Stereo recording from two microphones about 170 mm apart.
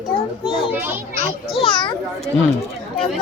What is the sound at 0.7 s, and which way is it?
Speech, 10° right (ahead or behind).